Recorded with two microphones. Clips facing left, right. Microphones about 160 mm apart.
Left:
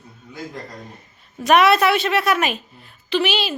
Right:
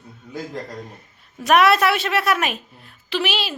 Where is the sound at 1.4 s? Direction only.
Centre (ahead or behind).